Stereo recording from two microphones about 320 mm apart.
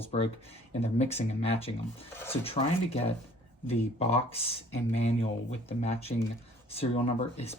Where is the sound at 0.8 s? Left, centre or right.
Centre.